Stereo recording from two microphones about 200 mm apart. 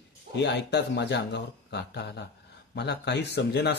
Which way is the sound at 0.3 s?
60° left (ahead or behind).